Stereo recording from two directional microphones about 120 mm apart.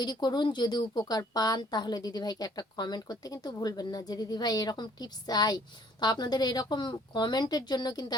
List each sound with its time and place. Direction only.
0.0 s a woman's voice: 35° left (ahead or behind)